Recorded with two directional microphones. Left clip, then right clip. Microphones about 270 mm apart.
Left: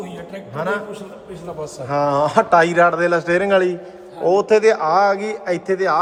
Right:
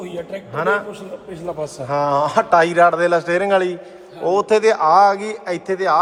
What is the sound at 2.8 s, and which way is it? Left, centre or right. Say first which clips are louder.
A man's voice: right 1 dB; centre.